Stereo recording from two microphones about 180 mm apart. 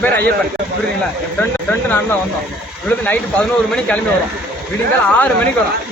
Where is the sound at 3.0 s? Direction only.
10° left (ahead or behind).